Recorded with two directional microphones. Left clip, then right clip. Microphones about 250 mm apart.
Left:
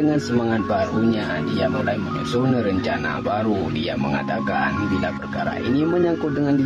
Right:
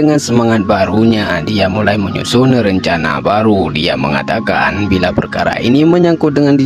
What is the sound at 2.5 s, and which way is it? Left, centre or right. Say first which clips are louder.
Speech: right 9 dB; right.